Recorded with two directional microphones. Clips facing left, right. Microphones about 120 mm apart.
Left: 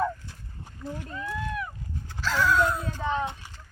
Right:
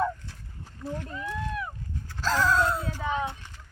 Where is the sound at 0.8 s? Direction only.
Centre (ahead or behind).